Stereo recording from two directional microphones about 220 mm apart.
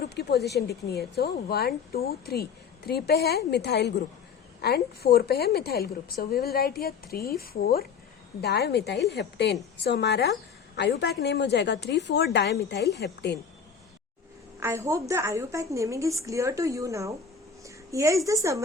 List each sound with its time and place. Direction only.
0.0 s a woman's voice: 45° left (ahead or behind)
14.6 s a woman's voice: 10° right (ahead or behind)
17.6 s a sound: 15° right (ahead or behind)